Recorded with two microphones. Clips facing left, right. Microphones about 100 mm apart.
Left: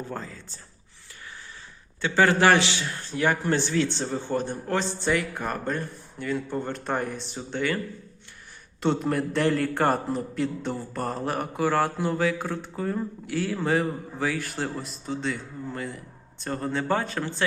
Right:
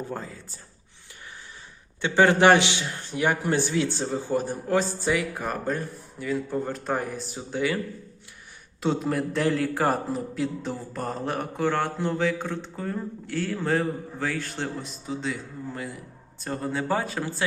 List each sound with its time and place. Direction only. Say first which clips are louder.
0.1 s speech: right 1 dB; 15° right (ahead or behind)
2.0 s a man's voice: right 2 dB; 20° right (ahead or behind)
8.8 s a man's voice: left 1 dB; centre (ahead or behind)